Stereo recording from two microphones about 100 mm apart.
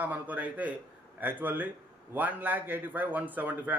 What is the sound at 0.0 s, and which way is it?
A man's voice, 15° right (ahead or behind).